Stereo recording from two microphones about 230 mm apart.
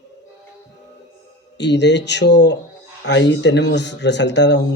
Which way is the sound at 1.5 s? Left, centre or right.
Left.